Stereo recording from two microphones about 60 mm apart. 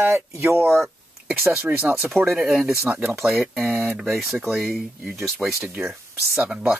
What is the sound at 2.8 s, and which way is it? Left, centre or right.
Speech, right.